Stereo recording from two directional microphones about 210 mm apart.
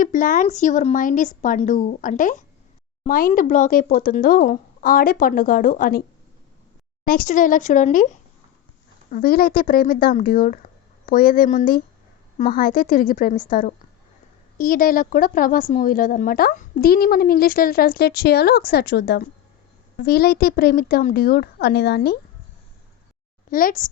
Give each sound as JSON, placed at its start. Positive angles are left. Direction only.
{"t": 0.0, "sound": "speech", "side_deg": 40}
{"t": 7.0, "sound": "speech", "side_deg": 40}
{"t": 23.5, "sound": "speech", "side_deg": 40}